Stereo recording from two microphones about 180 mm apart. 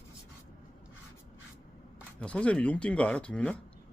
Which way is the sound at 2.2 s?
5° left (ahead or behind).